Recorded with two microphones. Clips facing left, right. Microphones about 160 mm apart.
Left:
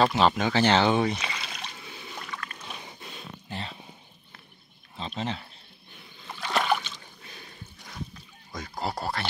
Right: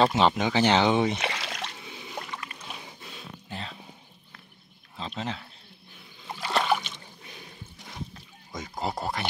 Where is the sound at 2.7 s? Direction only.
Centre (ahead or behind).